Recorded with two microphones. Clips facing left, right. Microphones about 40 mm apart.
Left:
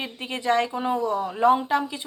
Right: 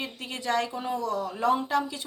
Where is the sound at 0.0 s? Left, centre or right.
Left.